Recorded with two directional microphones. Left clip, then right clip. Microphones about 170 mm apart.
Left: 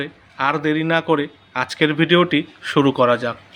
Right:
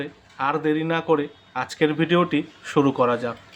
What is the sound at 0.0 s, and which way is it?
Speech, 10° left (ahead or behind).